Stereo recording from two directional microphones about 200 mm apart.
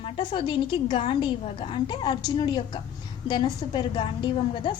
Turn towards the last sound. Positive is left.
turn(degrees=25)  # may be behind; listen again after turning